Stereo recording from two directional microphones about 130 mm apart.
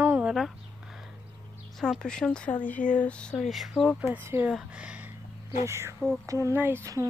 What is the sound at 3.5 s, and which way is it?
Speech, centre (ahead or behind).